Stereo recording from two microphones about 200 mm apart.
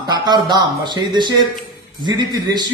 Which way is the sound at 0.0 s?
20° right (ahead or behind).